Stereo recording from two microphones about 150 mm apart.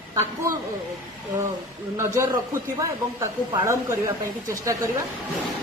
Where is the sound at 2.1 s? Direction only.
20° right (ahead or behind).